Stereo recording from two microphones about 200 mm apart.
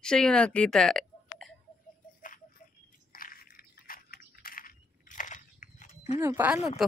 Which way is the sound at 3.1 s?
45° left (ahead or behind).